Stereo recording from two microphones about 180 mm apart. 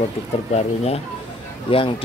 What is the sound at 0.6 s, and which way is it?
Speech, 35° left (ahead or behind).